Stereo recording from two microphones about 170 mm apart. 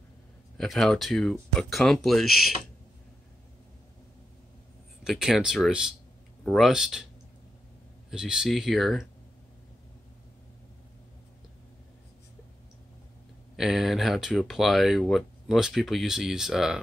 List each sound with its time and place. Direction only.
0.6 s speech: centre (ahead or behind)
5.0 s speech: centre (ahead or behind)
8.1 s speech: 5° right (ahead or behind)
13.6 s speech: centre (ahead or behind)